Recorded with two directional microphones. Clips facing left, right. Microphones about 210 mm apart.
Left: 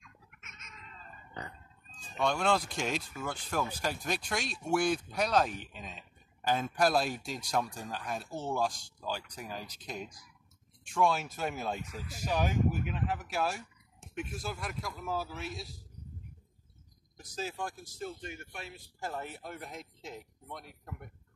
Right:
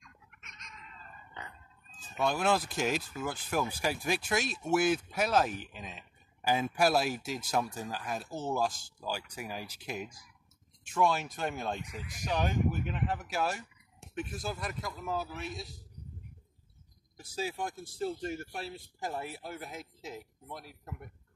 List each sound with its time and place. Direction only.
0.0 s a sound: 5° left (ahead or behind)
1.4 s a sound: 35° left (ahead or behind)
2.0 s speech: 5° right (ahead or behind)
17.2 s speech: 10° right (ahead or behind)
17.6 s speech: 30° right (ahead or behind)
18.9 s speech: 10° right (ahead or behind)